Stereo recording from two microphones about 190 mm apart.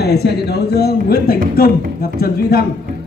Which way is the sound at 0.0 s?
60° left (ahead or behind).